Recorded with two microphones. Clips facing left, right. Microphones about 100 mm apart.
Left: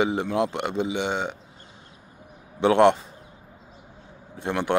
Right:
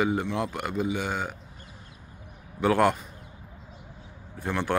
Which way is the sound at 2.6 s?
25° left (ahead or behind).